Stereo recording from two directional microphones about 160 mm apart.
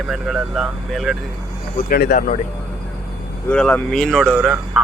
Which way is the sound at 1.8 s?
60° left (ahead or behind).